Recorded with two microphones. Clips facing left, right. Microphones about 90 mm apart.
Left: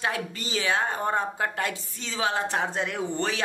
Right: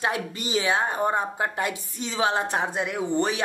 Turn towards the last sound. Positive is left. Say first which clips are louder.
# right 4 dB
turn(degrees=-15)  # may be behind; listen again after turning